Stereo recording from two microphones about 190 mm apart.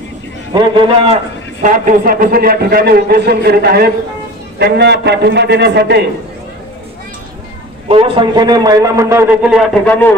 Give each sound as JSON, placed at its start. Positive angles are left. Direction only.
{"t": 0.5, "sound": "a man's voice", "side_deg": -25}
{"t": 1.7, "sound": "a man's voice", "side_deg": -45}
{"t": 7.9, "sound": "a man's voice", "side_deg": -30}
{"t": 9.8, "sound": "speech", "side_deg": 10}